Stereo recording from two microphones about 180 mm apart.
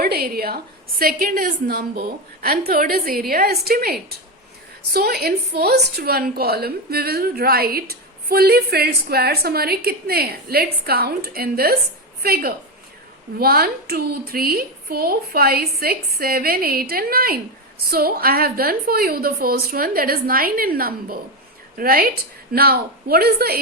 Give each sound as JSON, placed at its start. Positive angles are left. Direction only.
{"t": 0.0, "sound": "a woman's voice", "side_deg": -60}